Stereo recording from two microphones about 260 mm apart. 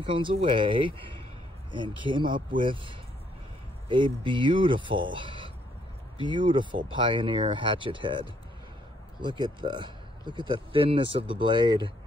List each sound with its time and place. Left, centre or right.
0.0 s speech: centre